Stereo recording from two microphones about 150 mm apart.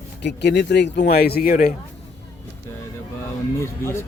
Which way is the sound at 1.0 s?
90° left.